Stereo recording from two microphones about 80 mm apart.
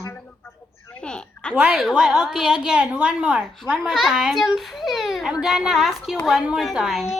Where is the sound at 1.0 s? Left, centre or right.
Centre.